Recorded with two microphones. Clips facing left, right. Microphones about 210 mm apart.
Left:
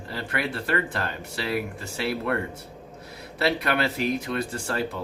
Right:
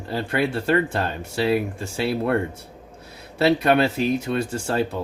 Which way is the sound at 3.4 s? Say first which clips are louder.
Right 7 dB; 25° right (ahead or behind).